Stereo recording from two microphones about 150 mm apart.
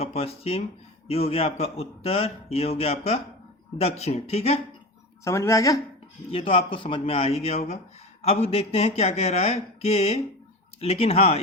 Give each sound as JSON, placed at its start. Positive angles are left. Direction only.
{"t": 0.0, "sound": "speech", "side_deg": 45}
{"t": 5.2, "sound": "speech", "side_deg": 20}
{"t": 6.3, "sound": "a man's voice", "side_deg": 35}